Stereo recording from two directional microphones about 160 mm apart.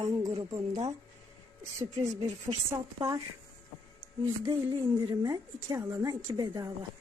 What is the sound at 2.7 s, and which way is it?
Speech, 20° right (ahead or behind).